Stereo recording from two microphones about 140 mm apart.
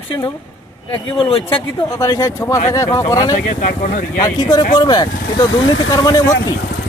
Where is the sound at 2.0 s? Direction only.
25° left (ahead or behind).